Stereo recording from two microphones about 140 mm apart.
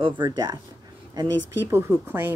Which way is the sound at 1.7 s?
15° right (ahead or behind).